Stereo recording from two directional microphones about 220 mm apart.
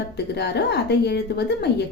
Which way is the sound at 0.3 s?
50° left (ahead or behind).